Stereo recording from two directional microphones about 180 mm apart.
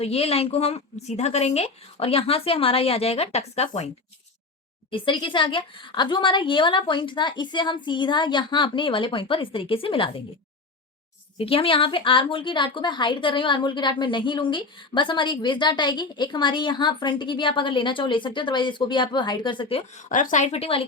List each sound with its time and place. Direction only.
0.0 s a woman's voice: 35° left (ahead or behind)
4.9 s a woman's voice: 30° left (ahead or behind)
11.3 s a woman's voice: 30° left (ahead or behind)
20.0 s a woman's voice: 45° left (ahead or behind)